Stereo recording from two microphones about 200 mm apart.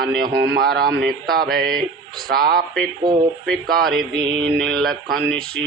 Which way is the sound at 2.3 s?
50° right (ahead or behind).